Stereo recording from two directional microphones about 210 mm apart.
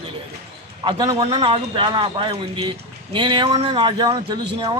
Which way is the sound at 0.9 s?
20° right (ahead or behind).